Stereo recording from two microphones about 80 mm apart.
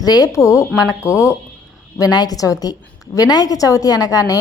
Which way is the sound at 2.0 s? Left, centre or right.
Left.